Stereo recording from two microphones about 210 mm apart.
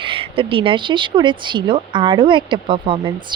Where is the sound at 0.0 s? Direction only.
25° right (ahead or behind).